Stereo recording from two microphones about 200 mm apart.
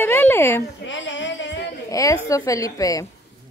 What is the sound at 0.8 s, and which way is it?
Speech, 65° left (ahead or behind).